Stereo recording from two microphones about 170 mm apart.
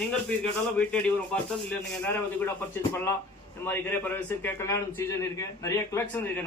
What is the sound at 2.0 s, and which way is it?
A man's voice, 15° left (ahead or behind).